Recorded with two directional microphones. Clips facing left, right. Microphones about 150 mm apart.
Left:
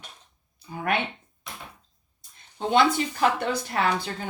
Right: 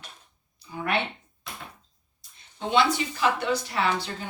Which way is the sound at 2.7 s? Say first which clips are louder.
Left 2 dB; 50° left (ahead or behind).